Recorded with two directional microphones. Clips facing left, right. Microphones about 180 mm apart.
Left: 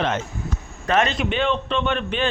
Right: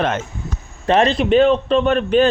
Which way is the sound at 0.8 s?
30° right (ahead or behind).